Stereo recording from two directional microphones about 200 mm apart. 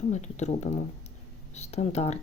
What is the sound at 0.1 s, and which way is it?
Speech, 35° left (ahead or behind).